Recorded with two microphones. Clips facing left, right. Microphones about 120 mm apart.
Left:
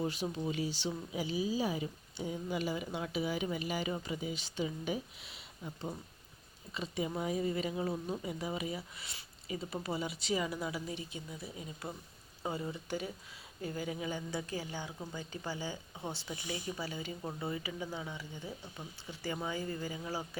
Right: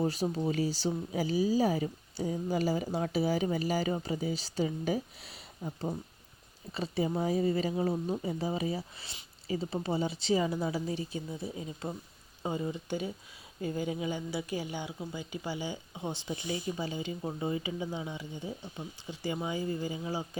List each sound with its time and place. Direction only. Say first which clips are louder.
0.0 s speech: right 5 dB; 40° right (ahead or behind); by 20.2 s 20° right (ahead or behind)